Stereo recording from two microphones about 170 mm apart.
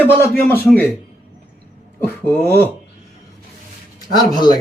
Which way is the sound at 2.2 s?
10° left (ahead or behind).